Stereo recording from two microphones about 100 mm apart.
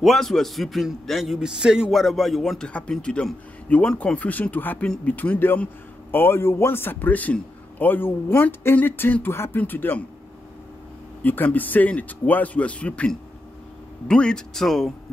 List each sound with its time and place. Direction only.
0.0 s a man's voice: centre (ahead or behind); by 10.0 s 20° left (ahead or behind)
11.2 s a man's voice: 15° left (ahead or behind)